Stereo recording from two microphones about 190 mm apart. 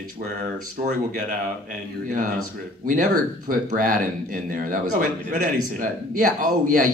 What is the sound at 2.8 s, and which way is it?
Speech, 45° right (ahead or behind).